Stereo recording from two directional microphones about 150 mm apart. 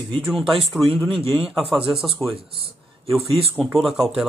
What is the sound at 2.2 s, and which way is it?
Speech, 15° left (ahead or behind).